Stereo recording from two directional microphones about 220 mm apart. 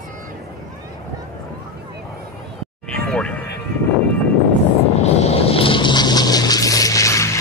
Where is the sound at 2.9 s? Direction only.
5° left (ahead or behind).